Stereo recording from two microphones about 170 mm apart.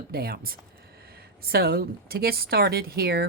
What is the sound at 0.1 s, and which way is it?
A woman's voice, 65° right (ahead or behind).